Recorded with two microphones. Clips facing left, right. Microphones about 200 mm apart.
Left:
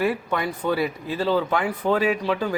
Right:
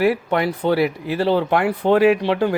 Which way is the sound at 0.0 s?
70° right (ahead or behind).